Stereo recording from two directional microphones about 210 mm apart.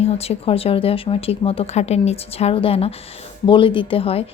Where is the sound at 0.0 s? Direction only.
30° left (ahead or behind).